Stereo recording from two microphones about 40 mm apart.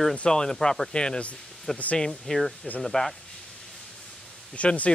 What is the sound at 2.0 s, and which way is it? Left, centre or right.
Speech, centre.